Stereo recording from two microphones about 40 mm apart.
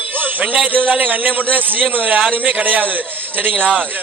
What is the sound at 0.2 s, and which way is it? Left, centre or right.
A man's voice, right.